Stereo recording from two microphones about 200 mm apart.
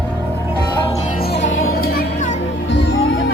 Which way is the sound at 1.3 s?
70° left (ahead or behind).